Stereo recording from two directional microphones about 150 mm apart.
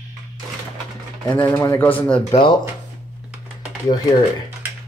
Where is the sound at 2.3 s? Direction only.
35° left (ahead or behind).